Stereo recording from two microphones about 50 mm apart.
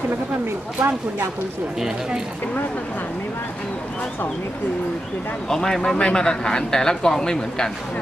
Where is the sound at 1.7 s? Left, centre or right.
Centre.